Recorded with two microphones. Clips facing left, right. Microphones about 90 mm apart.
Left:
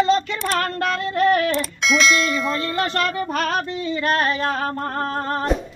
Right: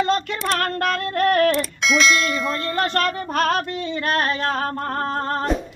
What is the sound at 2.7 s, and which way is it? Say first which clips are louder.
Music: right 3 dB; 50° right (ahead or behind).